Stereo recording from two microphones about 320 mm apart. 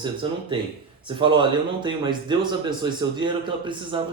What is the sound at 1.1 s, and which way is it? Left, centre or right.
Speech, centre.